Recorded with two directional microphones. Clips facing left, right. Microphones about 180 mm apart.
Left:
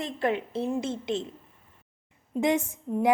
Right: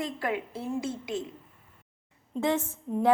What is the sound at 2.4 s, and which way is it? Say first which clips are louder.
Speech: left 2 dB; 15° left (ahead or behind).